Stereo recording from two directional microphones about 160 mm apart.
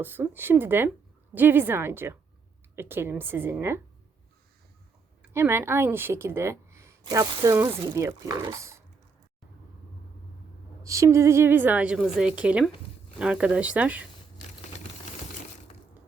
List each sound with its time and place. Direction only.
0.0 s a woman's voice: 15° right (ahead or behind)
5.3 s a woman's voice: 15° right (ahead or behind)
10.8 s a woman's voice: 20° right (ahead or behind)